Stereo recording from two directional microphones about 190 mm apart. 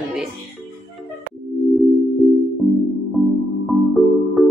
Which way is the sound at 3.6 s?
Centre (ahead or behind).